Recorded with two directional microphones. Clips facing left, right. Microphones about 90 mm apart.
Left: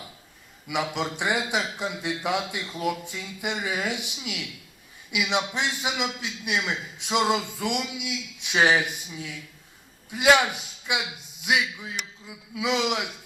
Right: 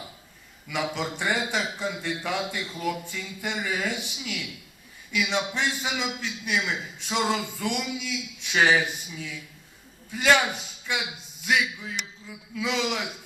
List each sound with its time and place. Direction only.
0.7 s a man's voice: 15° left (ahead or behind)